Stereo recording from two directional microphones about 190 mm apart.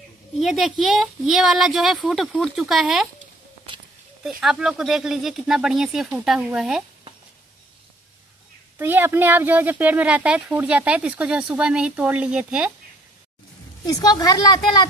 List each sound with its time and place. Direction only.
0.4 s speech: centre (ahead or behind)
4.2 s speech: centre (ahead or behind)
8.7 s speech: 10° right (ahead or behind)
13.8 s a woman's voice: 20° left (ahead or behind)